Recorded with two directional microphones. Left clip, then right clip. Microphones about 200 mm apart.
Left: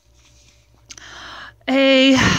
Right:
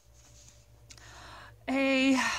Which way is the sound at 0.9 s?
20° left (ahead or behind).